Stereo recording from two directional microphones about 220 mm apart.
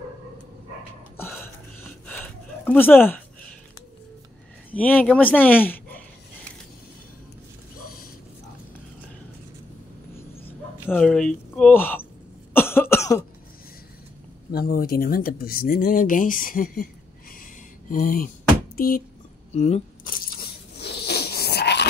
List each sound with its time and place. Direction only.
1.1 s a sound: 10° left (ahead or behind)
4.7 s speech: 5° left (ahead or behind)
10.9 s speech: 5° left (ahead or behind)
12.5 s cough: 10° left (ahead or behind)
14.5 s speech: 40° left (ahead or behind)
19.5 s a sound: 30° left (ahead or behind)
20.8 s zipper: 50° left (ahead or behind)